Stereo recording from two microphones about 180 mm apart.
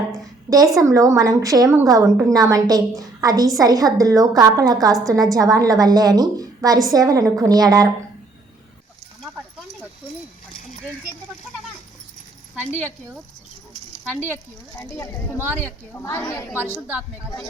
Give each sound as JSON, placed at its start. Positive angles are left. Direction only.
{"t": 0.5, "sound": "a woman's voice", "side_deg": -20}
{"t": 14.1, "sound": "a woman's voice", "side_deg": 10}